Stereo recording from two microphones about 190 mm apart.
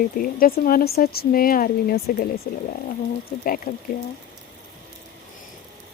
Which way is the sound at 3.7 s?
50° left (ahead or behind).